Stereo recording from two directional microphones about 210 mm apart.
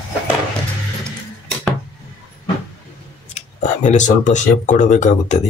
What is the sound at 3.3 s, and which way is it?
Speech, 35° left (ahead or behind).